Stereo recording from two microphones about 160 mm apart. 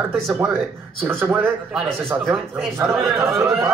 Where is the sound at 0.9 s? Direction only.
15° right (ahead or behind).